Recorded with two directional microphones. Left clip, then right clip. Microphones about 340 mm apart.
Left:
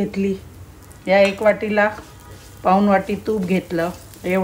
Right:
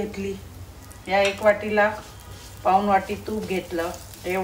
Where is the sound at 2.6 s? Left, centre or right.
Left.